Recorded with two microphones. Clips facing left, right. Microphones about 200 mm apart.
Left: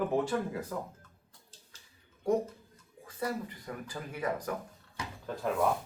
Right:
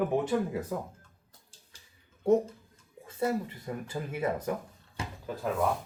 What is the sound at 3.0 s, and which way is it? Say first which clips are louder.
Speech: right 5 dB; 25° right (ahead or behind).